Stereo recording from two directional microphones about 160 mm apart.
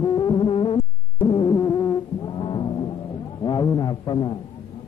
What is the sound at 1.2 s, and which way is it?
Music, 30° left (ahead or behind).